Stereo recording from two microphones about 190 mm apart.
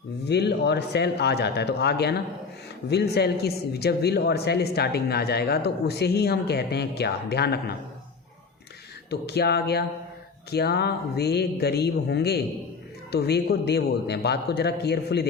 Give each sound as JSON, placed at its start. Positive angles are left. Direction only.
{"t": 0.3, "sound": "a man's voice", "side_deg": 60}
{"t": 9.0, "sound": "a man's voice", "side_deg": 60}